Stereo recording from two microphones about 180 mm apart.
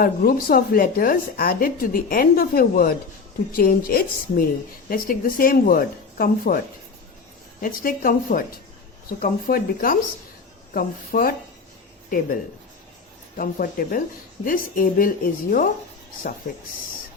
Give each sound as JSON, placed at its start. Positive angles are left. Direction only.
{"t": 0.0, "sound": "a woman's voice", "side_deg": 55}
{"t": 7.6, "sound": "a woman's voice", "side_deg": 50}
{"t": 13.3, "sound": "a woman's voice", "side_deg": 50}